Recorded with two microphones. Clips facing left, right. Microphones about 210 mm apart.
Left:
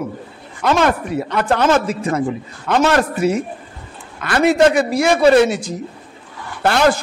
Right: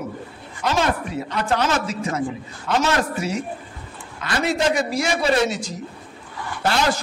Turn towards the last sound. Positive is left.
turn(degrees=60)  # may be behind; listen again after turning